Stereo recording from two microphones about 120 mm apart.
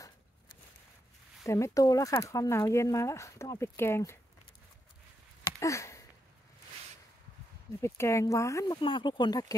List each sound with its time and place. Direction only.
1.4 s speech: 25° left (ahead or behind)
5.6 s a sound: 25° left (ahead or behind)
7.8 s speech: 25° left (ahead or behind)
8.8 s speech: 45° left (ahead or behind)